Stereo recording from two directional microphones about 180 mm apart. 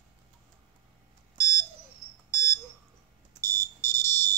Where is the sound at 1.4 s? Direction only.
20° left (ahead or behind).